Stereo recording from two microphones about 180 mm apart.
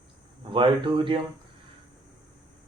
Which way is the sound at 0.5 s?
30° right (ahead or behind).